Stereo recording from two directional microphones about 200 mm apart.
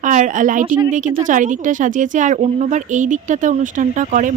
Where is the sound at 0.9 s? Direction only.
40° right (ahead or behind).